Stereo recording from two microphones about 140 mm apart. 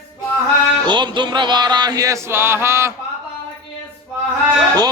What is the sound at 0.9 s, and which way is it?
Music, 35° right (ahead or behind).